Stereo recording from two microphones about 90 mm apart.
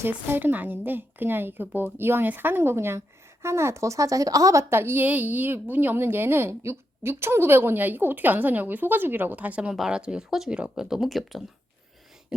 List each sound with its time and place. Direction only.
0.0 s a woman's voice: 25° right (ahead or behind); by 4.6 s 40° right (ahead or behind)
4.7 s a woman's voice: 25° right (ahead or behind); by 11.4 s centre (ahead or behind)